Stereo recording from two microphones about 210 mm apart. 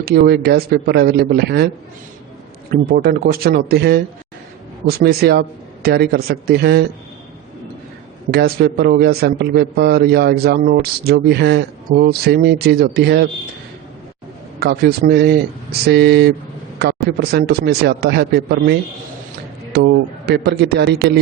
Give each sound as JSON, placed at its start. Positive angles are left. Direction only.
{"t": 0.0, "sound": "a man's voice", "side_deg": -50}
{"t": 2.9, "sound": "a man's voice", "side_deg": -45}
{"t": 8.3, "sound": "a man's voice", "side_deg": -50}
{"t": 14.6, "sound": "a man's voice", "side_deg": -45}